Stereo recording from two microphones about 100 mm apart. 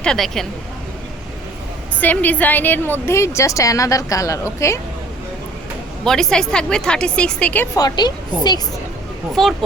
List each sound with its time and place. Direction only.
0.0 s a woman's voice: 5° left (ahead or behind)
2.0 s a woman's voice: 15° left (ahead or behind)
6.1 s a woman's voice: 5° left (ahead or behind)
7.8 s a woman's voice: 45° left (ahead or behind)
9.3 s a woman's voice: centre (ahead or behind)